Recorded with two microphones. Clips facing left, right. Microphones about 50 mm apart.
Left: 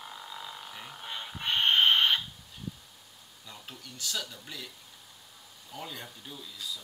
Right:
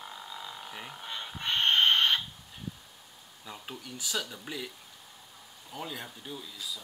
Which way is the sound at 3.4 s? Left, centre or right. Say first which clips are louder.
Right 4 dB; centre.